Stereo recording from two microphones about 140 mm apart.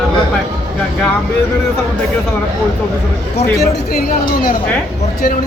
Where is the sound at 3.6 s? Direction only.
90° left.